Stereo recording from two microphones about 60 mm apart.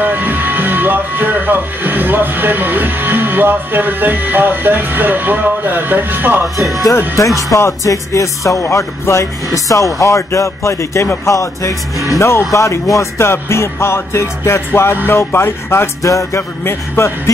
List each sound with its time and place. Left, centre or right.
0.0 s speech: right
6.9 s music: left
7.5 s speech: left
11.2 s speech: left
12.1 s music: left
12.5 s speech: left
13.2 s music: left
16.0 s speech: left
16.3 s music: left